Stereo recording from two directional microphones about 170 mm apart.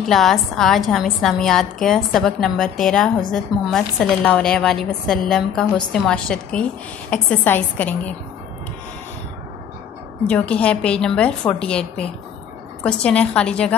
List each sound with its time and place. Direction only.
0.1 s a woman's voice: centre (ahead or behind)
10.2 s a woman's voice: 5° left (ahead or behind)